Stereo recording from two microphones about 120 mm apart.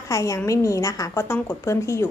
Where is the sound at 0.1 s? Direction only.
25° left (ahead or behind).